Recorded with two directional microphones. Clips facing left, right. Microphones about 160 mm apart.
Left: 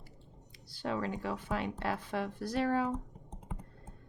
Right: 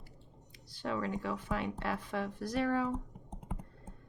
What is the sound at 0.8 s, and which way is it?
Speech, 30° left (ahead or behind).